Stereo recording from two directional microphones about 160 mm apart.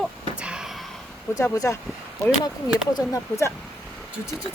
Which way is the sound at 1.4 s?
20° left (ahead or behind).